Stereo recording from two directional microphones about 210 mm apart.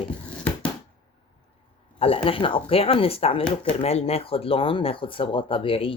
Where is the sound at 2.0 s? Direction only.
25° left (ahead or behind).